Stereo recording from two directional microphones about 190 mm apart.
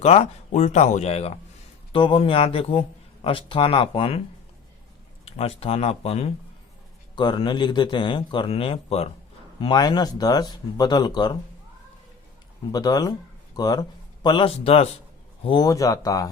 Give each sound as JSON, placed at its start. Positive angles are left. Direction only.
{"t": 0.0, "sound": "speech", "side_deg": 35}
{"t": 5.2, "sound": "speech", "side_deg": 30}
{"t": 12.7, "sound": "speech", "side_deg": 20}
{"t": 15.4, "sound": "speech", "side_deg": 20}